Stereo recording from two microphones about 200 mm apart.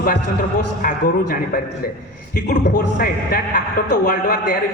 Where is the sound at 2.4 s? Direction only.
50° left (ahead or behind).